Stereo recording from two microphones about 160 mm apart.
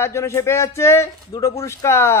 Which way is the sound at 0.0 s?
15° left (ahead or behind).